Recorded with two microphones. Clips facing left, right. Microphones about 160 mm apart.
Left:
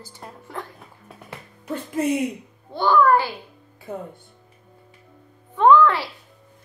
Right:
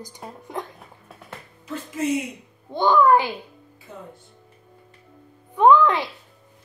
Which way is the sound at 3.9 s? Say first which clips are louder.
Left 9 dB; 55° left (ahead or behind).